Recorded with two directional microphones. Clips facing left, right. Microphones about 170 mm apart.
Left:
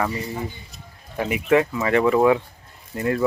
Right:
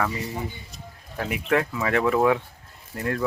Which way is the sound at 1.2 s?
5° left (ahead or behind).